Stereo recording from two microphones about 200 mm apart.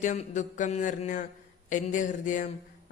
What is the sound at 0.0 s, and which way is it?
Speech, 35° left (ahead or behind).